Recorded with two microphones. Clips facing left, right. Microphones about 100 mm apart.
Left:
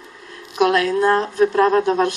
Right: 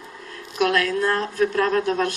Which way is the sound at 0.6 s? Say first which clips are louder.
Left 5 dB; 20° left (ahead or behind).